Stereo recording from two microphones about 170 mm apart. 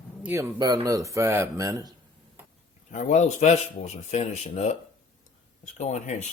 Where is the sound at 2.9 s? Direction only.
45° left (ahead or behind).